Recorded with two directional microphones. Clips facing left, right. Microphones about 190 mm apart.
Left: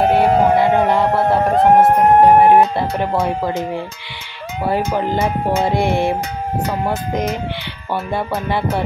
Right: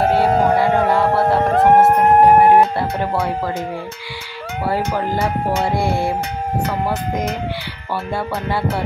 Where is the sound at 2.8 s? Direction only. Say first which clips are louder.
Left 2 dB; 20° left (ahead or behind).